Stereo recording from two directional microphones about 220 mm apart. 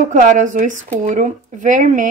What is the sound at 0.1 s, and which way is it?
A woman's voice, 35° right (ahead or behind).